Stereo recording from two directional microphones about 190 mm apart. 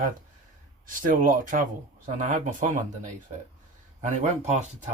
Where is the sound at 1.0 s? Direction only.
45° right (ahead or behind).